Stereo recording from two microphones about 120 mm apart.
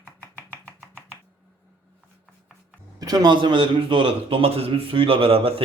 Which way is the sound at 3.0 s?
30° right (ahead or behind).